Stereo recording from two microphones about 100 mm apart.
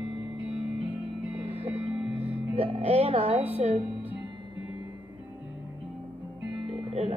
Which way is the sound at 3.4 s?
90° right.